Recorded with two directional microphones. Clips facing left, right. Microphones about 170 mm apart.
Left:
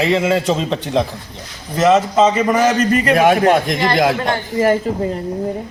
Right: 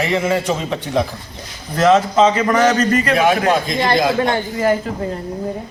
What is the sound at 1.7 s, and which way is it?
Speech, 5° left (ahead or behind).